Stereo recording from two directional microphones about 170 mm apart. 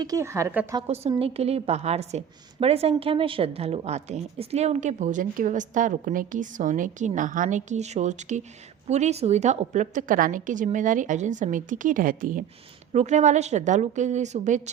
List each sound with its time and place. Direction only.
0.0 s a woman's voice: 20° right (ahead or behind)
0.8 s a woman's voice: 35° right (ahead or behind); by 12.5 s 55° right (ahead or behind)
12.9 s a woman's voice: 40° right (ahead or behind)